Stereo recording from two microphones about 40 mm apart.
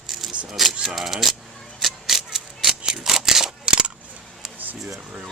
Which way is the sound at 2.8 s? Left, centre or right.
Centre.